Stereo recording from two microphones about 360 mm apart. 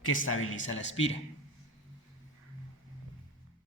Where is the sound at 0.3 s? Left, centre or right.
Left.